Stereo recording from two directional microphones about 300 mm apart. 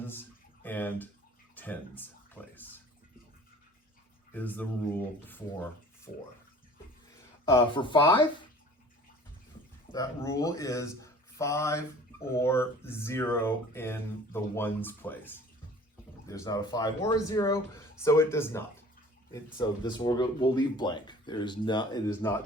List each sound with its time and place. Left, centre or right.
0.6 s speech: centre
1.5 s a sound: centre
4.4 s speech: centre
6.1 s speech: left
7.4 s speech: centre
9.9 s speech: centre